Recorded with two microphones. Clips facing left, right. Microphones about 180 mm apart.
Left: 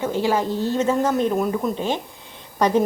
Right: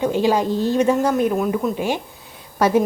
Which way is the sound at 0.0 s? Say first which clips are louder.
Right 3 dB; 15° right (ahead or behind).